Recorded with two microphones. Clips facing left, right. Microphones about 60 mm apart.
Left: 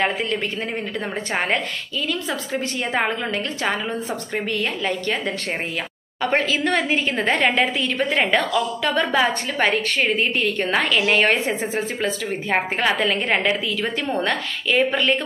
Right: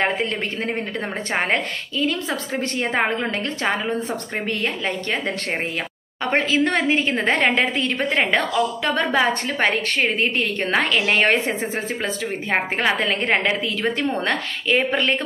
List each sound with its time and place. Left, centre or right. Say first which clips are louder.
0.0 s a woman's voice: even; right
1.4 s a woman's voice: right 1 dB; right